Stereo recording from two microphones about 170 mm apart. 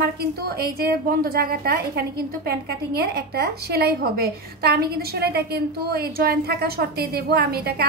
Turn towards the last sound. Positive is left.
turn(degrees=-70)  # may be behind; listen again after turning